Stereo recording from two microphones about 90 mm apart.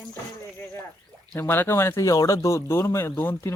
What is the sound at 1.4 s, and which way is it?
A child's voice, 25° left (ahead or behind).